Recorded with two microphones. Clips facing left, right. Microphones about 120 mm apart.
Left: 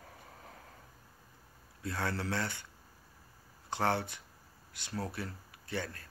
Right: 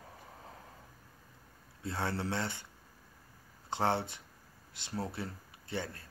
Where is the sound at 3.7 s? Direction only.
25° right (ahead or behind).